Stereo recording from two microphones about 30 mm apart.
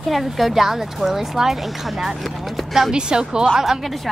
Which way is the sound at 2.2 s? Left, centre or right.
Centre.